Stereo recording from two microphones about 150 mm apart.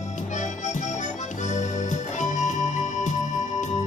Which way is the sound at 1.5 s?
55° left (ahead or behind).